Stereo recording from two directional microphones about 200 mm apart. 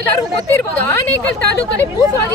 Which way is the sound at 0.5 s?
10° left (ahead or behind).